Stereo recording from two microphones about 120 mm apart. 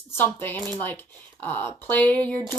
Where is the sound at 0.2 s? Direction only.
20° left (ahead or behind).